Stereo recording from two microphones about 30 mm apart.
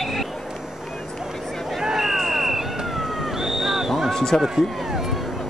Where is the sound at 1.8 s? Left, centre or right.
Centre.